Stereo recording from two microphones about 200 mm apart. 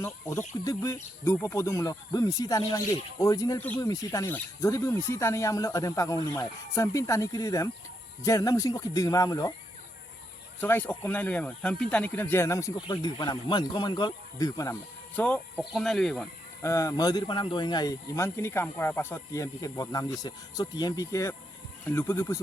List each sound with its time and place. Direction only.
0.0 s speech: 15° left (ahead or behind)
10.6 s speech: 10° left (ahead or behind)
16.6 s speech: 15° left (ahead or behind)